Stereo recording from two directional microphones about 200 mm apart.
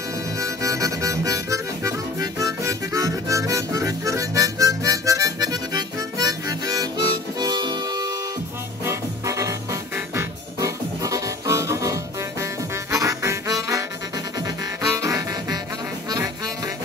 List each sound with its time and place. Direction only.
0.4 s music: 15° right (ahead or behind)
12.9 s harmonica: 15° right (ahead or behind)
15.0 s harmonica: 15° right (ahead or behind)
16.1 s music: 20° right (ahead or behind)